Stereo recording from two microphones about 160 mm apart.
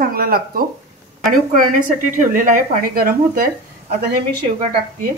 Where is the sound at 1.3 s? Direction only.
55° right (ahead or behind).